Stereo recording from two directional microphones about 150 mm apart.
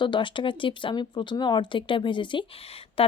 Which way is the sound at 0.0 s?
30° left (ahead or behind).